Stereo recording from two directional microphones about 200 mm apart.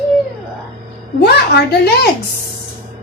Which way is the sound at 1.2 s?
55° left (ahead or behind).